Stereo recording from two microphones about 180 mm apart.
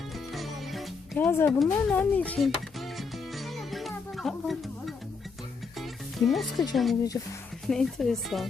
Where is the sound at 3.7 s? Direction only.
Centre (ahead or behind).